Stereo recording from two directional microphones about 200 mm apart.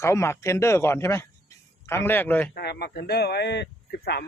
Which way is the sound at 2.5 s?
55° left (ahead or behind).